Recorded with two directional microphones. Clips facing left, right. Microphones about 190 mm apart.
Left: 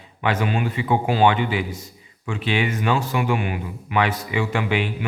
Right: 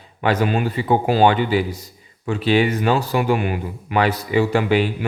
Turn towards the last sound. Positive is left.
turn(degrees=-35)  # may be behind; listen again after turning